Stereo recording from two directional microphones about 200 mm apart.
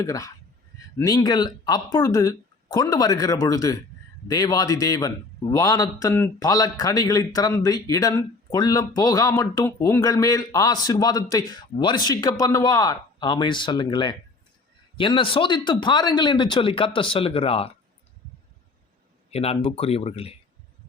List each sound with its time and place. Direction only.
0.0 s a man's voice: 15° left (ahead or behind)
19.3 s speech: 30° left (ahead or behind)